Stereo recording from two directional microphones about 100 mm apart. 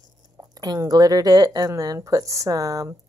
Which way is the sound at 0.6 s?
40° right (ahead or behind).